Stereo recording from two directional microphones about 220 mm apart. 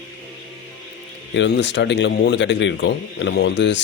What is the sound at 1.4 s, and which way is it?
A man's voice, 55° left (ahead or behind).